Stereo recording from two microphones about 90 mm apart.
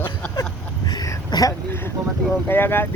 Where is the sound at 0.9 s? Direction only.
50° left (ahead or behind).